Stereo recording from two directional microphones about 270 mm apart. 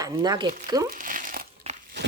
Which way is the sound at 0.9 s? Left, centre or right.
Right.